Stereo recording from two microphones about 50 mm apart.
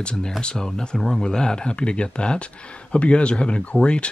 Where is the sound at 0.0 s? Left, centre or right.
Centre.